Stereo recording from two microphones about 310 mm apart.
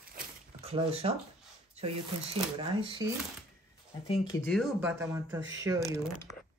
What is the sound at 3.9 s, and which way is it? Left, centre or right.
Speech, centre.